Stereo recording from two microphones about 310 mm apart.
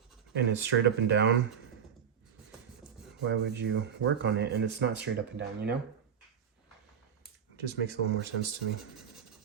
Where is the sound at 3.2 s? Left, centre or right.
Right.